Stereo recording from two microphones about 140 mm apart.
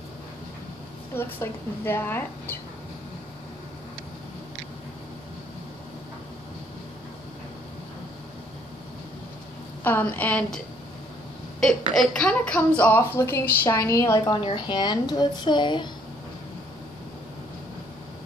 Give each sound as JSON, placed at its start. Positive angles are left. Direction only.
{"t": 1.1, "sound": "a woman's voice", "side_deg": 15}
{"t": 9.8, "sound": "a woman's voice", "side_deg": 10}
{"t": 11.6, "sound": "a woman's voice", "side_deg": 5}